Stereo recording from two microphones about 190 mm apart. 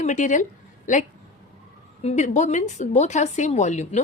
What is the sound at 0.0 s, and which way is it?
Speech, 40° left (ahead or behind).